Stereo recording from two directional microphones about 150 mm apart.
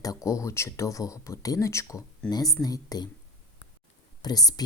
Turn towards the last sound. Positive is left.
turn(degrees=25)  # may be behind; listen again after turning